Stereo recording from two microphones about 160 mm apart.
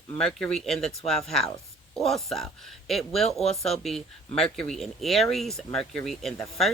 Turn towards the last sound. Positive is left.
turn(degrees=0)  # may be behind; listen again after turning